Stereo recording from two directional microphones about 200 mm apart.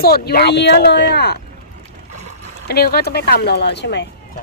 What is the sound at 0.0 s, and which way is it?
Speech, 50° left (ahead or behind).